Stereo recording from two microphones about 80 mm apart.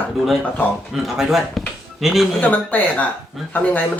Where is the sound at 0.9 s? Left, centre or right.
Centre.